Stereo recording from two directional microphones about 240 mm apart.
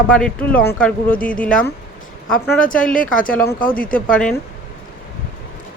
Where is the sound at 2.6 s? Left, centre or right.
Left.